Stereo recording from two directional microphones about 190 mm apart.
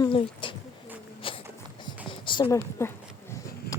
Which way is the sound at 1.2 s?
25° left (ahead or behind).